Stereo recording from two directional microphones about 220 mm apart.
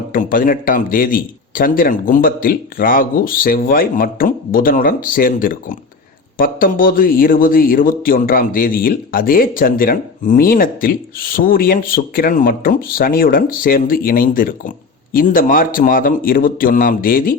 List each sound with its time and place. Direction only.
0.1 s a man's voice: 40° left (ahead or behind)